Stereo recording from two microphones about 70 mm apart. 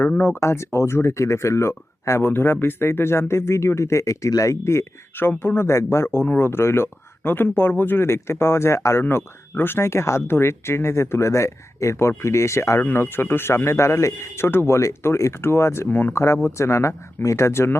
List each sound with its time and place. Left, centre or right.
0.3 s speech: left
12.8 s speech: left
15.9 s speech: left
16.1 s speech: left